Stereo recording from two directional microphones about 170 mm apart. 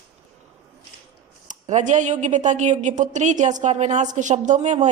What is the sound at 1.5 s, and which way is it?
A woman's voice, 45° right (ahead or behind).